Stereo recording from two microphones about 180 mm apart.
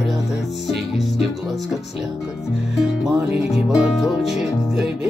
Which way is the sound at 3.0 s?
15° right (ahead or behind).